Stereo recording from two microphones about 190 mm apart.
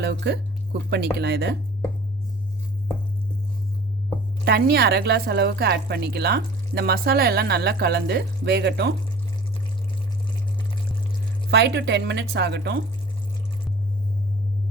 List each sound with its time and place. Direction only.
0.0 s a woman's voice: 65° right (ahead or behind)
4.4 s a woman's voice: 55° right (ahead or behind)
11.5 s a woman's voice: 65° right (ahead or behind)